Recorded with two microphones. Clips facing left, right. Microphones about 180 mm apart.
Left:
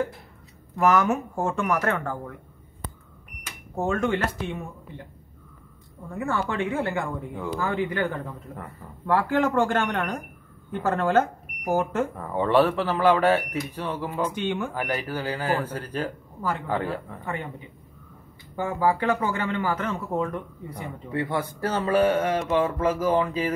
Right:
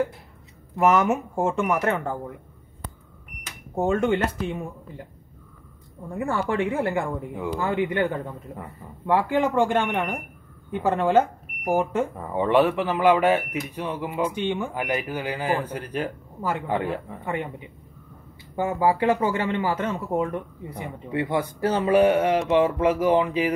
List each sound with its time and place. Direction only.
0.7 s speech: 20° right (ahead or behind)
3.7 s speech: 25° right (ahead or behind)
6.0 s speech: 30° right (ahead or behind)
8.5 s speech: 15° right (ahead or behind)
18.6 s speech: 25° right (ahead or behind)